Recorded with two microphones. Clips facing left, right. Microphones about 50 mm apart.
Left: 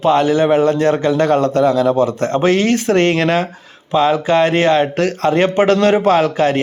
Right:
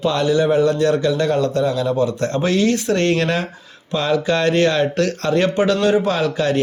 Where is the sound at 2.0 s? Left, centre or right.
Left.